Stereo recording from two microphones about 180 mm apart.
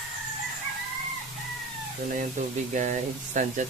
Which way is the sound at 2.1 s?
45° right (ahead or behind).